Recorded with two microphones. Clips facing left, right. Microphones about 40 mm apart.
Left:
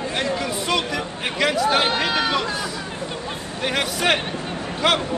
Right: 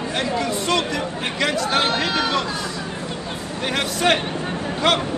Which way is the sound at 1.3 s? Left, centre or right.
Centre.